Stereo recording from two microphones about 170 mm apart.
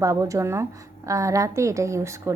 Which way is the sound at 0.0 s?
20° right (ahead or behind).